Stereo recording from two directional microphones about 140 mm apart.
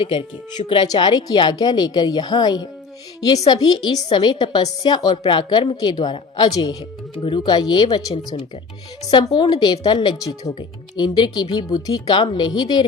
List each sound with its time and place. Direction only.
0.0 s a woman's voice: 40° left (ahead or behind)